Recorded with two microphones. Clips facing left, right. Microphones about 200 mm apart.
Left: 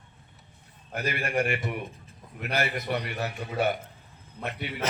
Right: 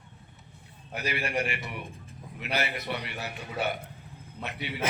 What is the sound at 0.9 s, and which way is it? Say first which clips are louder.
A man's voice: left 3 dB; 50° left (ahead or behind).